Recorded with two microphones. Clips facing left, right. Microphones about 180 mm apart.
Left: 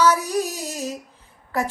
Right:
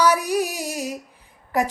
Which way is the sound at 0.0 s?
15° right (ahead or behind).